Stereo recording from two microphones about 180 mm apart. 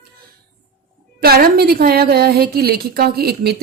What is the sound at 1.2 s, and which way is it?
A woman's voice, 55° right (ahead or behind).